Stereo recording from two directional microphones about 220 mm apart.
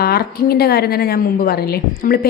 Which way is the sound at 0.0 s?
45° left (ahead or behind).